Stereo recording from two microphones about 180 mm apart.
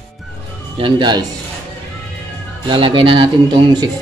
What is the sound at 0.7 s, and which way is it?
Speech, 25° right (ahead or behind).